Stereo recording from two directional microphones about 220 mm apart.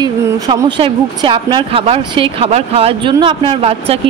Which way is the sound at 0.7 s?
25° right (ahead or behind).